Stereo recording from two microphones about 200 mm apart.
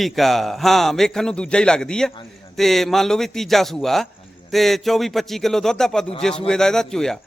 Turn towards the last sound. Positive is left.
turn(degrees=0)  # may be behind; listen again after turning